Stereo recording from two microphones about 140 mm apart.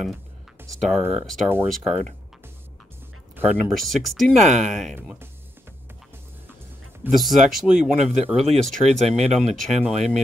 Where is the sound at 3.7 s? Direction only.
Centre (ahead or behind).